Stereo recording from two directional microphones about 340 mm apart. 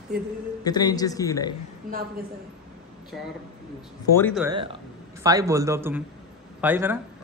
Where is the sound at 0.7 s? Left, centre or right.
Centre.